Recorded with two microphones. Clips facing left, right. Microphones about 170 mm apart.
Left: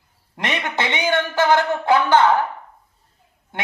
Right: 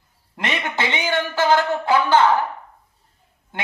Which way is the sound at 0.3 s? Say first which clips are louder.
Left 1 dB; 20° left (ahead or behind).